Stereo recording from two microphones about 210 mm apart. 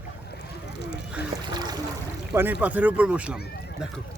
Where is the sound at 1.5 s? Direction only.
20° right (ahead or behind).